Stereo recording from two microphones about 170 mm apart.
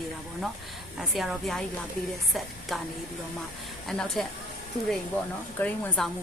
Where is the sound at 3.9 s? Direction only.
Centre (ahead or behind).